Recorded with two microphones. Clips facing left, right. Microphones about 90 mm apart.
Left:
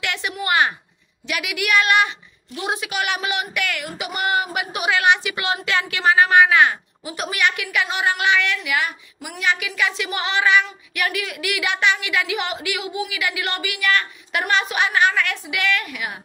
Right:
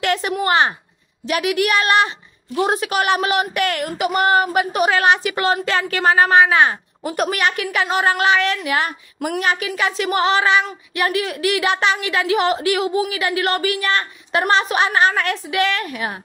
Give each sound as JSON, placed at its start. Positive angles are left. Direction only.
{"t": 0.0, "sound": "speech", "side_deg": -40}
{"t": 7.0, "sound": "speech", "side_deg": -50}